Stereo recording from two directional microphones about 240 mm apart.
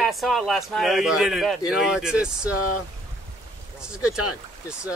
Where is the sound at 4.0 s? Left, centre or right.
Left.